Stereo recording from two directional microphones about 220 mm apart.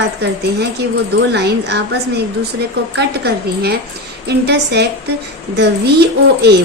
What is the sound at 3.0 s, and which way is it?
A woman's voice, 45° right (ahead or behind).